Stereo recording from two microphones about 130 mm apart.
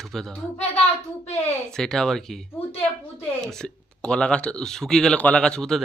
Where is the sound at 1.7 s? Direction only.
5° left (ahead or behind).